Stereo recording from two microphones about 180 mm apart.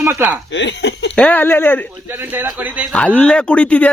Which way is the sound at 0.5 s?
75° left (ahead or behind).